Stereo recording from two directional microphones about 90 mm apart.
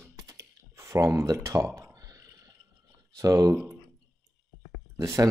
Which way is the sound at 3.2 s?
40° right (ahead or behind).